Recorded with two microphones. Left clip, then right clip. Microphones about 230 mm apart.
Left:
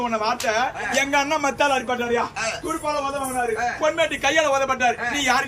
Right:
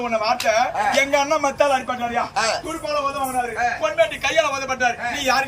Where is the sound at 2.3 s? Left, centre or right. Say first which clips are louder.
Right 6 dB; right.